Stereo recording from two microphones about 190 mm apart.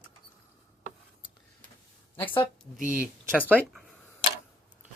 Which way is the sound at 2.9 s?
5° right (ahead or behind).